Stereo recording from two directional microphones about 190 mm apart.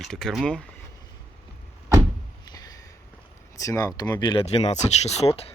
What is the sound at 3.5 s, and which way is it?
Speech, 15° left (ahead or behind).